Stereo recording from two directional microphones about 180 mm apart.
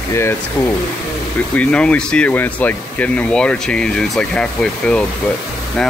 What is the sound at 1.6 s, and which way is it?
Speech, 5° left (ahead or behind).